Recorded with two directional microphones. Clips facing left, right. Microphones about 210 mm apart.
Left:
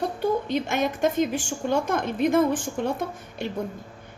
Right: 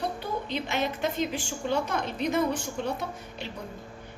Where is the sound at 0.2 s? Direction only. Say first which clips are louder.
Left 8 dB; 50° left (ahead or behind).